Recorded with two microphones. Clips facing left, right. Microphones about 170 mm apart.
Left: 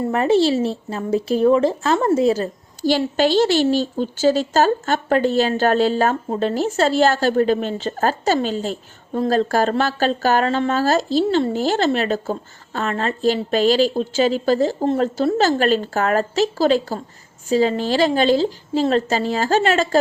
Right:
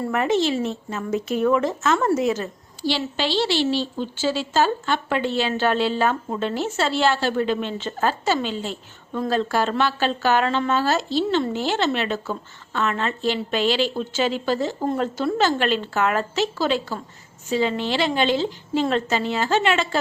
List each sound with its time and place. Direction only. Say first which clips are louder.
0.0 s speech: left 5 dB; 30° left (ahead or behind)